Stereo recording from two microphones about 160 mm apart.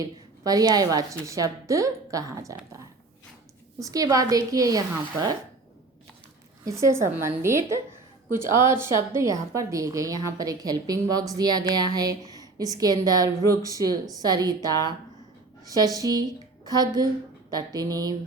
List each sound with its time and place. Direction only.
0.0 s a woman's voice: 25° right (ahead or behind)
6.7 s a woman's voice: 20° right (ahead or behind)